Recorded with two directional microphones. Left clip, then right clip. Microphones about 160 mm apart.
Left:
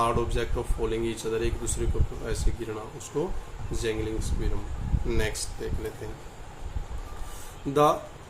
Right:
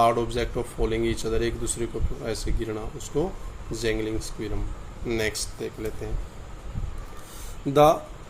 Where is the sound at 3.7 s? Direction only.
30° right (ahead or behind).